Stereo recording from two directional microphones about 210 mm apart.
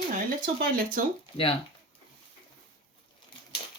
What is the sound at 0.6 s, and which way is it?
Speech, 45° right (ahead or behind).